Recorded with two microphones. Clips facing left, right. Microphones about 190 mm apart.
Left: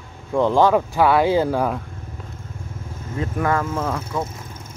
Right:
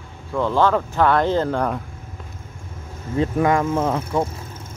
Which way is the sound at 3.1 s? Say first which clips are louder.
Right 4 dB; 20° right (ahead or behind).